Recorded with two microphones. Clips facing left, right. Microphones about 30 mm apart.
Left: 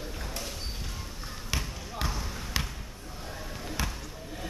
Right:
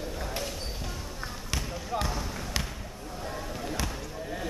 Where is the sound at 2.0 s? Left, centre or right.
Centre.